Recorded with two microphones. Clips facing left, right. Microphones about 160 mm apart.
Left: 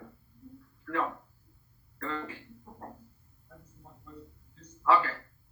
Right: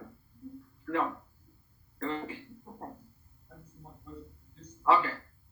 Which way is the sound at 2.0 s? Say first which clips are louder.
Right 2 dB; 25° right (ahead or behind).